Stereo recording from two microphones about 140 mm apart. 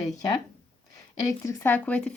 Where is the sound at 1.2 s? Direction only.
20° left (ahead or behind).